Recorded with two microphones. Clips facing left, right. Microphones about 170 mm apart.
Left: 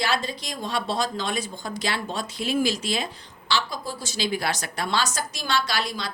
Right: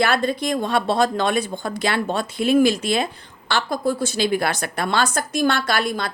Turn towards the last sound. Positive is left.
turn(degrees=-55)  # may be behind; listen again after turning